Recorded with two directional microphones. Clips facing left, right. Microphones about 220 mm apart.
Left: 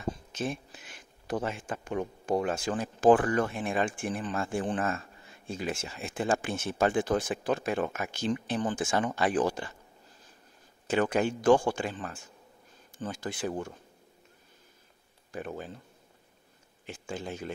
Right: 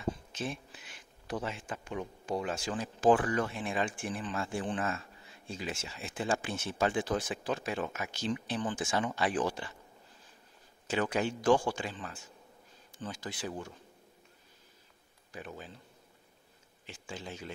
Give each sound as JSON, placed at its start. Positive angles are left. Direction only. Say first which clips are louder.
{"t": 0.3, "sound": "a sound", "louder": "left 4 dB", "side_deg": 45}
{"t": 1.2, "sound": "speech", "louder": "left 5 dB", "side_deg": 50}
{"t": 10.9, "sound": "speech", "louder": "left 5 dB", "side_deg": 50}
{"t": 15.3, "sound": "speech", "louder": "left 7 dB", "side_deg": 50}
{"t": 16.8, "sound": "speech", "louder": "left 6 dB", "side_deg": 50}